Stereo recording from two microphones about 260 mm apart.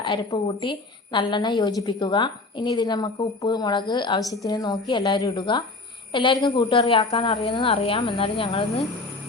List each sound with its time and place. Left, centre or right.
0.0 s a woman's voice: centre